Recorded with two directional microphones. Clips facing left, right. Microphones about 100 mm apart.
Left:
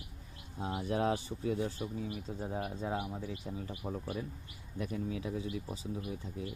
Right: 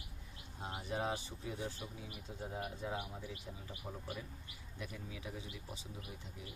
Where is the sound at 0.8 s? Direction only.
60° left (ahead or behind).